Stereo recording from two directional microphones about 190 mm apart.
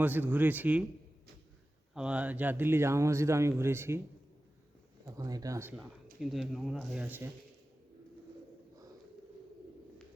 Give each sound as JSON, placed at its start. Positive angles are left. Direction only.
{"t": 0.0, "sound": "speech", "side_deg": -10}
{"t": 2.0, "sound": "speech", "side_deg": -5}
{"t": 5.0, "sound": "speech", "side_deg": -20}
{"t": 6.3, "sound": "speech", "side_deg": 0}